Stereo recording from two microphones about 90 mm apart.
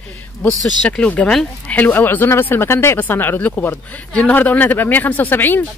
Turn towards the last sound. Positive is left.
turn(degrees=20)  # may be behind; listen again after turning